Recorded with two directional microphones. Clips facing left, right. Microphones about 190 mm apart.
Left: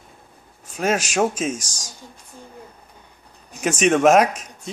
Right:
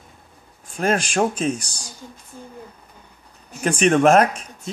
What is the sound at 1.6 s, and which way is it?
Speech, 90° left.